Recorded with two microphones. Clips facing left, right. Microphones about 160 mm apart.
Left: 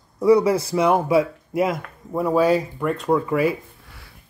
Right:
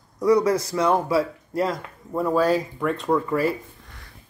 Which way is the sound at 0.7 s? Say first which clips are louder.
Left 5 dB; 15° left (ahead or behind).